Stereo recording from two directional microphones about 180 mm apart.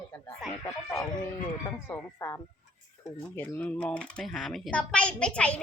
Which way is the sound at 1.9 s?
15° left (ahead or behind).